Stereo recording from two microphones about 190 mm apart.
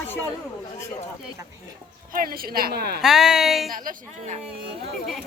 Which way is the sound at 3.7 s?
45° right (ahead or behind).